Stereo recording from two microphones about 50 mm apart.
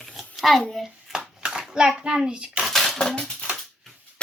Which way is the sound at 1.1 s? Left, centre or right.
Centre.